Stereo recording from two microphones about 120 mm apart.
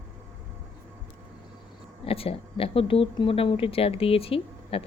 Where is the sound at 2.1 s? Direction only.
50° left (ahead or behind).